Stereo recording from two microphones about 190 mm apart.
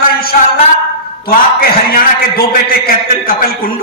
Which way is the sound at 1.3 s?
50° left (ahead or behind).